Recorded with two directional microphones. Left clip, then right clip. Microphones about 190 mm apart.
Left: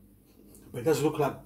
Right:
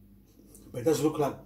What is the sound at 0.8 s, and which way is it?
Speech, 15° left (ahead or behind).